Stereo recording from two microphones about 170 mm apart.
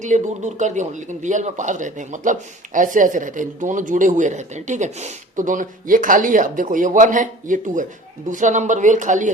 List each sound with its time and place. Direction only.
0.0 s speech: 45° right (ahead or behind)